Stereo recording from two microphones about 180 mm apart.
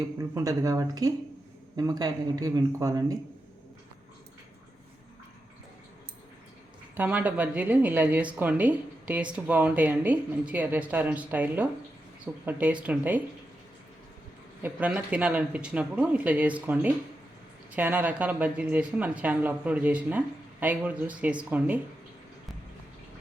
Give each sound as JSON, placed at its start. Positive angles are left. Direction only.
{"t": 0.2, "sound": "speech", "side_deg": -20}
{"t": 6.9, "sound": "speech", "side_deg": -10}
{"t": 14.6, "sound": "speech", "side_deg": -10}